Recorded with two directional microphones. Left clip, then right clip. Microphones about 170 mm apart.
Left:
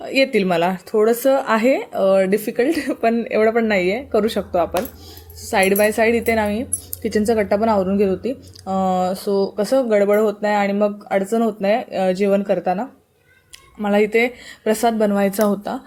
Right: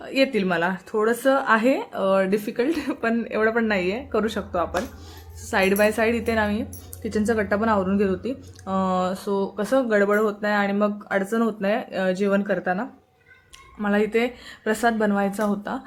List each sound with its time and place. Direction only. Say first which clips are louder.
0.0 s speech: left 5 dB; 25° left (ahead or behind)
8.7 s speech: left 5 dB; centre (ahead or behind)
9.0 s speech: left 5 dB; 15° left (ahead or behind)
13.8 s speech: left 6 dB; 20° left (ahead or behind)